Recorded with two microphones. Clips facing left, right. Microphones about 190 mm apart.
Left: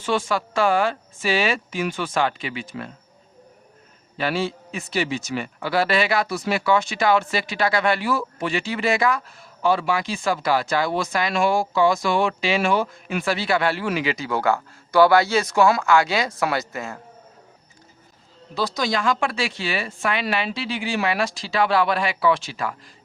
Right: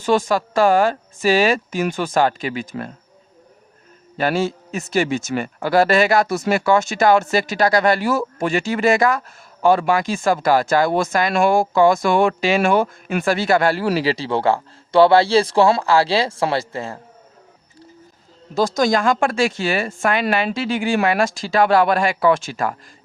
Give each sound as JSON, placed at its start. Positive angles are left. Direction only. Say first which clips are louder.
{"t": 0.0, "sound": "a man's voice", "louder": "right 5 dB", "side_deg": -40}
{"t": 4.2, "sound": "a man's voice", "louder": "right 4 dB", "side_deg": -45}
{"t": 18.5, "sound": "a man's voice", "louder": "right 7 dB", "side_deg": -45}